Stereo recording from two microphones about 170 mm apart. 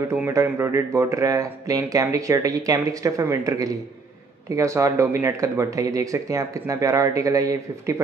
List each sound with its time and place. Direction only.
0.1 s speech: 15° right (ahead or behind)